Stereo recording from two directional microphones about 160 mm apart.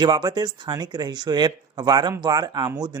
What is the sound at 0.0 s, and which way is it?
Speech, 25° right (ahead or behind).